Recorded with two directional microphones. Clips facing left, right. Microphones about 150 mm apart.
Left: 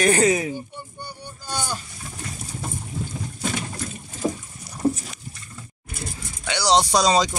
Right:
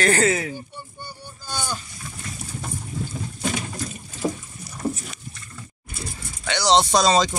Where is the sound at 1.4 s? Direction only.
15° left (ahead or behind).